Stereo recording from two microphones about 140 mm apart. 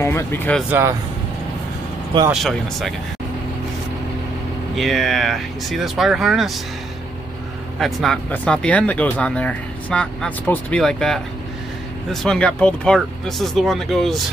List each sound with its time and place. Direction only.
0.0 s speech: 20° left (ahead or behind)
0.7 s speech: 15° right (ahead or behind)
2.3 s speech: centre (ahead or behind)
4.7 s speech: centre (ahead or behind)
7.8 s speech: centre (ahead or behind)